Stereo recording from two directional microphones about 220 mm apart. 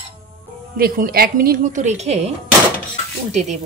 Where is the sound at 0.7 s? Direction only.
40° right (ahead or behind).